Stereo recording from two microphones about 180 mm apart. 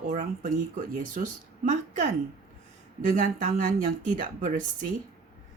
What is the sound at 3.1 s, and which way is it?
Speech, 45° right (ahead or behind).